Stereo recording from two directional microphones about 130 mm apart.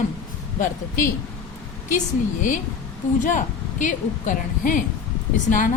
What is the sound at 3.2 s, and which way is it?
A woman's voice, 80° left.